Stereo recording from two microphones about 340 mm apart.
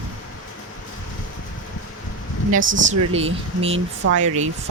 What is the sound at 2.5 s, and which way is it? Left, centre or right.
Speech, right.